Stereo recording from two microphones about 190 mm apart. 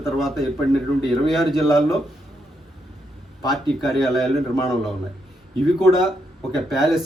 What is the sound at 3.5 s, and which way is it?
Speech, centre (ahead or behind).